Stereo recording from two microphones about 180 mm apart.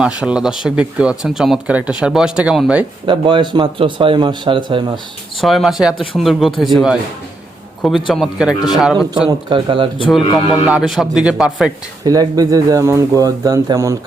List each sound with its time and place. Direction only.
0.0 s speech: 5° right (ahead or behind)
3.1 s speech: 25° right (ahead or behind)
5.4 s speech: centre (ahead or behind)
9.5 s speech: 30° right (ahead or behind)
10.1 s speech: centre (ahead or behind)
12.0 s speech: 20° right (ahead or behind)